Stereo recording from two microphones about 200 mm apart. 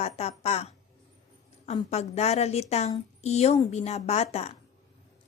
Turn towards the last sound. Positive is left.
turn(degrees=35)  # may be behind; listen again after turning